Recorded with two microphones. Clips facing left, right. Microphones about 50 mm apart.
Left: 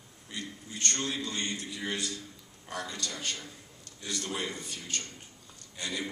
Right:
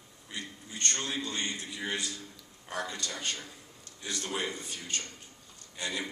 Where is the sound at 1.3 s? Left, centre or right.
Centre.